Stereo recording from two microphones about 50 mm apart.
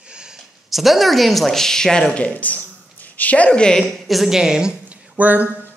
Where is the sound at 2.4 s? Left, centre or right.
Left.